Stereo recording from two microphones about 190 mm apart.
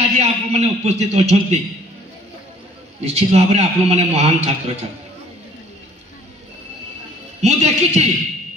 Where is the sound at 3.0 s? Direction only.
35° right (ahead or behind).